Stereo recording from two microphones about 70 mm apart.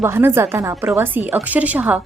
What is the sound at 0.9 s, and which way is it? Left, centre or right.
A woman's voice, right.